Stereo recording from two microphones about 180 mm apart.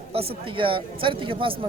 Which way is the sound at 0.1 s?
30° right (ahead or behind).